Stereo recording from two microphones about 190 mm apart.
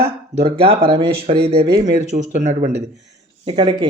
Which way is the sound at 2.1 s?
40° right (ahead or behind).